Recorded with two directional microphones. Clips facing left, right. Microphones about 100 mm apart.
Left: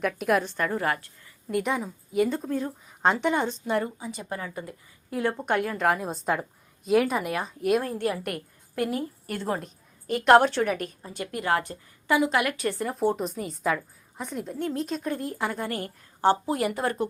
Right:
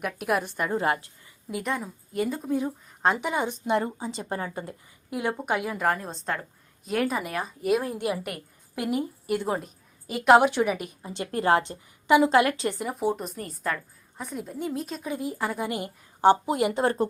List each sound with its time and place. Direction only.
0.0 s a woman's voice: 5° right (ahead or behind); by 0.9 s 20° right (ahead or behind)
1.5 s a woman's voice: centre (ahead or behind)
2.5 s a woman's voice: 15° right (ahead or behind)
3.0 s a woman's voice: centre (ahead or behind)
3.8 s a woman's voice: 30° right (ahead or behind)
5.1 s a woman's voice: 15° right (ahead or behind)
5.9 s a woman's voice: 10° left (ahead or behind)
7.9 s a woman's voice: 15° right (ahead or behind)
8.2 s a woman's voice: 5° right (ahead or behind)
8.8 s a woman's voice: 15° right (ahead or behind)
10.1 s a woman's voice: 5° right (ahead or behind)
11.1 s a woman's voice: 30° right (ahead or behind)
12.8 s a woman's voice: 5° right (ahead or behind)
15.5 s a woman's voice: 15° right (ahead or behind)